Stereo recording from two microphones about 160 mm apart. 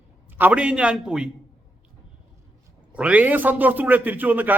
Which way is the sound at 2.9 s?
10° right (ahead or behind).